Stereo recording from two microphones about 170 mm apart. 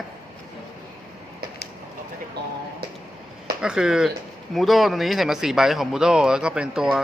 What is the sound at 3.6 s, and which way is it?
Speech, 5° right (ahead or behind).